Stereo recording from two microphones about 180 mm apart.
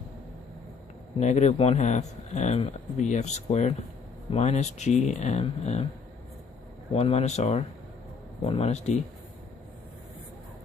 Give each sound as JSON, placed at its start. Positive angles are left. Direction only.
{"t": 1.2, "sound": "speech", "side_deg": 40}
{"t": 6.9, "sound": "speech", "side_deg": 35}